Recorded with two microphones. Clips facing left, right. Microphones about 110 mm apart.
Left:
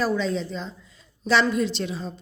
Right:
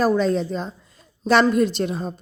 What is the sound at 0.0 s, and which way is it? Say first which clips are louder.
A woman's voice: right 5 dB; 50° right (ahead or behind).